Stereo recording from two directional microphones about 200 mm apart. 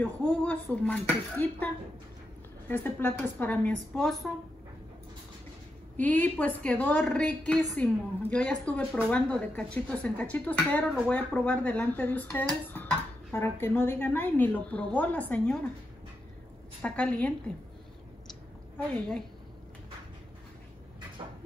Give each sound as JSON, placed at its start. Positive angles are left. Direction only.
{"t": 0.0, "sound": "speech", "side_deg": 10}
{"t": 2.7, "sound": "a woman's voice", "side_deg": 10}
{"t": 5.9, "sound": "a woman's voice", "side_deg": 10}
{"t": 16.8, "sound": "speech", "side_deg": 5}
{"t": 21.2, "sound": "a sound", "side_deg": -20}